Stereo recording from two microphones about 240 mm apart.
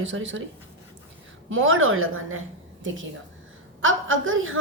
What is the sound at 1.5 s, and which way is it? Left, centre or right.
Speech, right.